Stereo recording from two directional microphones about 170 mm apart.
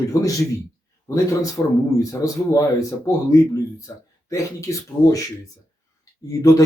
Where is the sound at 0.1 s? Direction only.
20° left (ahead or behind).